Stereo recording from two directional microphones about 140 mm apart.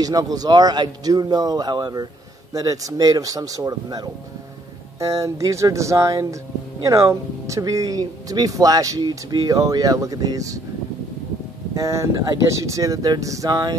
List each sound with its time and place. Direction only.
0.0 s speech: 25° right (ahead or behind)
11.7 s speech: 20° right (ahead or behind)